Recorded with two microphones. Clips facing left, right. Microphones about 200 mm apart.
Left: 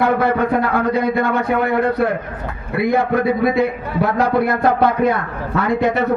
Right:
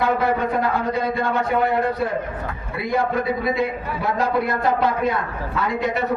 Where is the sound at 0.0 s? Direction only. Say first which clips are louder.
Left 4 dB; 65° left (ahead or behind).